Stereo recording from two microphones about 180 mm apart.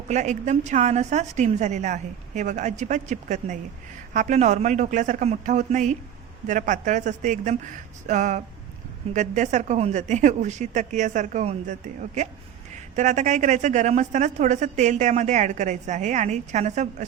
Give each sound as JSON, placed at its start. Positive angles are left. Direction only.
{"t": 0.1, "sound": "a woman's voice", "side_deg": -40}
{"t": 13.0, "sound": "a woman's voice", "side_deg": -40}